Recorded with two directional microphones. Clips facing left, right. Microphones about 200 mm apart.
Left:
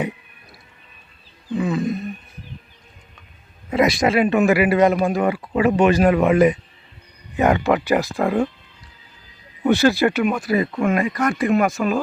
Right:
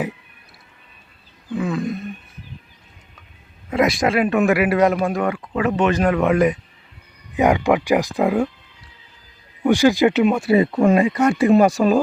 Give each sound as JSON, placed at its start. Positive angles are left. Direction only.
{"t": 1.5, "sound": "a man's voice", "side_deg": 0}
{"t": 3.7, "sound": "a man's voice", "side_deg": 0}
{"t": 7.3, "sound": "speech", "side_deg": -15}
{"t": 9.6, "sound": "speech", "side_deg": -15}